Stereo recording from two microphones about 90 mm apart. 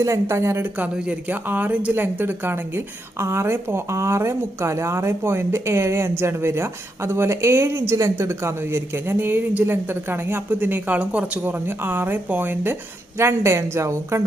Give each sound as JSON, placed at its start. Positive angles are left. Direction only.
{"t": 0.0, "sound": "speech", "side_deg": -30}